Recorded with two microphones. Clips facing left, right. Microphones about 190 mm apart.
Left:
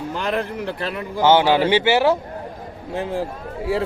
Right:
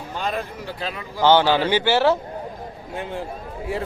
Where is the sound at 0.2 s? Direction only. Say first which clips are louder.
Left 2 dB; 70° left (ahead or behind).